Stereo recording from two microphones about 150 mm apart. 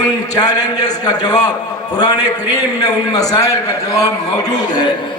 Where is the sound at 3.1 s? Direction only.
25° left (ahead or behind).